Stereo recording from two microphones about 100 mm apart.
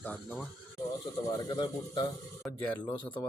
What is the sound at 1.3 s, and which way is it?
Speech, 40° left (ahead or behind).